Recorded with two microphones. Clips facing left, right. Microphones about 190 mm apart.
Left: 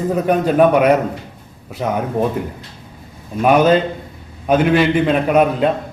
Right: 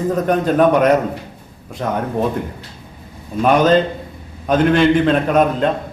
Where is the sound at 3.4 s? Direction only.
10° left (ahead or behind).